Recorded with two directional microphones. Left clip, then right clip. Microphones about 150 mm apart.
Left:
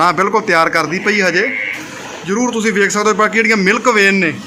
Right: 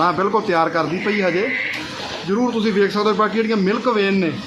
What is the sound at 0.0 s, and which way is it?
A man's voice, 20° left (ahead or behind).